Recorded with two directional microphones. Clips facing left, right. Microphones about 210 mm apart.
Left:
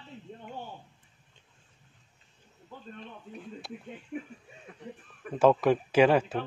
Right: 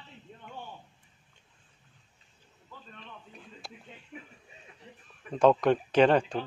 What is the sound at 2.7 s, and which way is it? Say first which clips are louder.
Speech: left 5 dB; 50° left (ahead or behind).